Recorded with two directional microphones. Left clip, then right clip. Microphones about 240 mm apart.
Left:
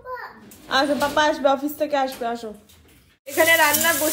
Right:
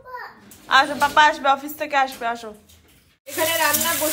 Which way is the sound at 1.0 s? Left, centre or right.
Centre.